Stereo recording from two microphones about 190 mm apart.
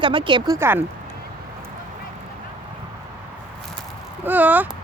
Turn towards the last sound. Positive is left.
turn(degrees=-10)  # may be behind; listen again after turning